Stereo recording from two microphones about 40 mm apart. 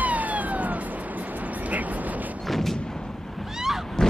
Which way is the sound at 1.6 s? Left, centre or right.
Right.